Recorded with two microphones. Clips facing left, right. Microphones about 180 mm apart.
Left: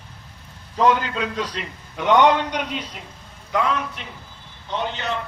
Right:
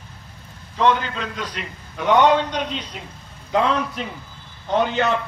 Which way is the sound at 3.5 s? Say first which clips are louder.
Right 3 dB; 35° right (ahead or behind).